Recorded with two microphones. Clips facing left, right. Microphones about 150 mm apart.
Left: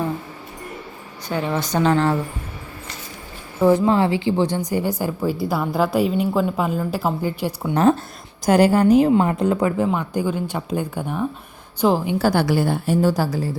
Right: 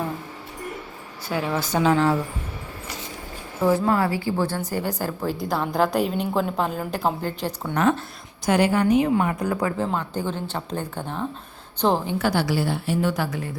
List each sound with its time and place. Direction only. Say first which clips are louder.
1.3 s a woman's voice: left 2 dB; 5° right (ahead or behind)
3.6 s a woman's voice: left 4 dB; 20° left (ahead or behind)
7.7 s a woman's voice: left 5 dB; 35° left (ahead or behind); by 12.1 s 10° left (ahead or behind)
12.2 s a woman's voice: left 4 dB; 50° left (ahead or behind); by 13.6 s 35° left (ahead or behind)